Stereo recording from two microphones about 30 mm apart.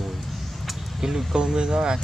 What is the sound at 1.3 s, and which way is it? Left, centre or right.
Speech, right.